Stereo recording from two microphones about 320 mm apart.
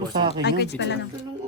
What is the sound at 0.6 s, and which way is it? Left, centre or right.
Speech, left.